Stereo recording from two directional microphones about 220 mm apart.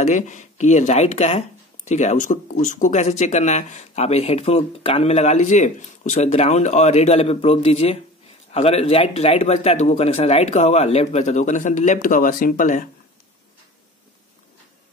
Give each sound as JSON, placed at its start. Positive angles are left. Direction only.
{"t": 0.0, "sound": "speech", "side_deg": 35}